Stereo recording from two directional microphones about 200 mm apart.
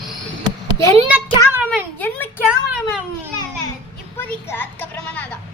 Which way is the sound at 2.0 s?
10° left (ahead or behind).